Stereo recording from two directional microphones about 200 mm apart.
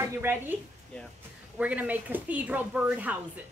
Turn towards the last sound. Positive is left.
turn(degrees=-5)  # may be behind; listen again after turning